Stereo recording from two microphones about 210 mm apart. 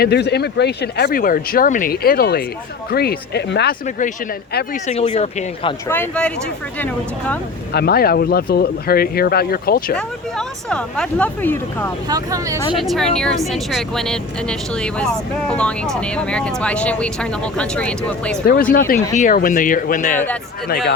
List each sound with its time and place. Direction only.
0.0 s speech: 50° left (ahead or behind)
3.8 s speech: 35° left (ahead or behind)
5.9 s speech: 5° left (ahead or behind)
7.7 s speech: 50° left (ahead or behind)
9.9 s speech: 5° left (ahead or behind)
12.0 s speech: 15° right (ahead or behind)
12.7 s speech: centre (ahead or behind)
18.4 s speech: 45° left (ahead or behind)
20.7 s speech: 45° left (ahead or behind)